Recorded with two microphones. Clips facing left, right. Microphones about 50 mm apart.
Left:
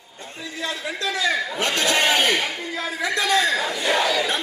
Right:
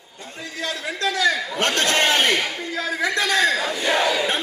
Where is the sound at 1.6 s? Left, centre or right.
Right.